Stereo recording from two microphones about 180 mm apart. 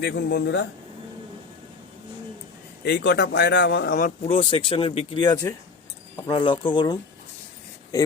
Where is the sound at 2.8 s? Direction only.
65° left (ahead or behind).